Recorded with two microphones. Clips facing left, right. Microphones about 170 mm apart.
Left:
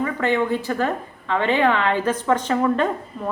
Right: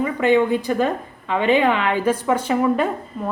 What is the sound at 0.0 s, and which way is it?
A woman's voice, 15° right (ahead or behind).